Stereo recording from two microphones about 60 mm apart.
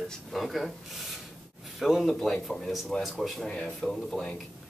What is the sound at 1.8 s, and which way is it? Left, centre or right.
Speech, centre.